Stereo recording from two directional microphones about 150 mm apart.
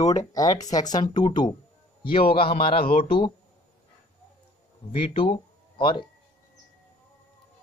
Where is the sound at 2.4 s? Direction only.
90° left.